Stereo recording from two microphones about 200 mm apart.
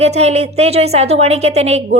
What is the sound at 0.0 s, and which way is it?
A woman's voice, 30° right (ahead or behind).